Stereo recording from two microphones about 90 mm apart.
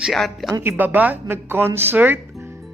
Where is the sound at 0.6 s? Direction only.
20° right (ahead or behind).